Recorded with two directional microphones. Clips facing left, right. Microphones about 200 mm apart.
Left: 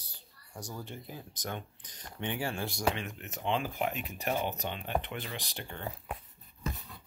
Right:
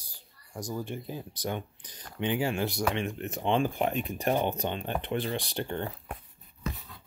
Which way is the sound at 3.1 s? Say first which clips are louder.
Right 6 dB; 35° right (ahead or behind).